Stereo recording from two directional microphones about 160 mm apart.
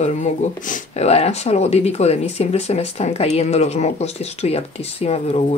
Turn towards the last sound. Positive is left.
turn(degrees=40)  # may be behind; listen again after turning